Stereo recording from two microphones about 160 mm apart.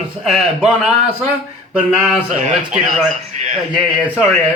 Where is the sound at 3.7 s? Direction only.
Centre (ahead or behind).